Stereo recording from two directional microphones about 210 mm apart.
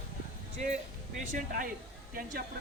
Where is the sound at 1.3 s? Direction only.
40° right (ahead or behind).